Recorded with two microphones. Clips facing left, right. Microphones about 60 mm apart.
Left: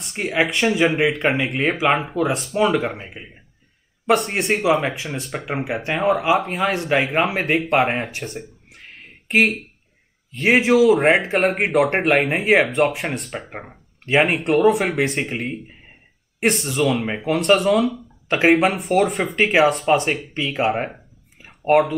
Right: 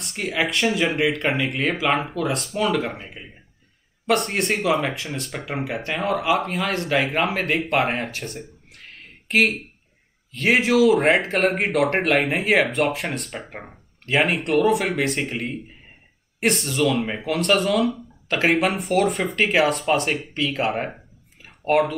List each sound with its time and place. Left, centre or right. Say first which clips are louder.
0.1 s speech: left 3 dB; centre
4.3 s speech: left 3 dB; centre
6.7 s speech: left 2 dB; centre
7.2 s speech: left 3 dB; centre
8.2 s a sound: left 2 dB; centre
10.5 s speech: left 2 dB; centre
13.5 s speech: left 3 dB; centre
16.4 s speech: left 2 dB; centre
19.3 s speech: left 4 dB; centre
19.6 s speech: left 3 dB; centre